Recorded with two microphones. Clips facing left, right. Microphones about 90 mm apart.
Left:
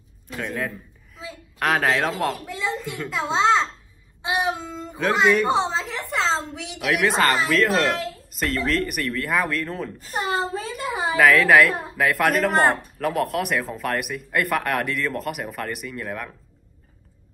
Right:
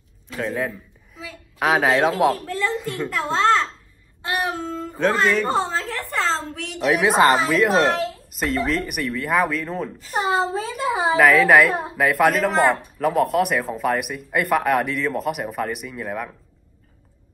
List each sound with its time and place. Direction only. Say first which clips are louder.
0.4 s a sound: right 3 dB; 5° right (ahead or behind)
1.6 s speech: right 3 dB; centre (ahead or behind)
2.3 s a sound: right 4 dB; 15° left (ahead or behind)
3.1 s a child's voice: right 1 dB; 15° left (ahead or behind)
4.2 s child singing: even; 15° left (ahead or behind)
5.1 s speech: left 4 dB; 10° left (ahead or behind)
5.6 s a sound: even; 20° left (ahead or behind)
6.7 s speech: right 3 dB; centre (ahead or behind)
7.8 s a child's voice: right 3 dB; 35° right (ahead or behind)
8.3 s speech: even; centre (ahead or behind)
10.2 s a sound: right 4 dB; 25° right (ahead or behind)
11.1 s speech: right 1 dB; centre (ahead or behind)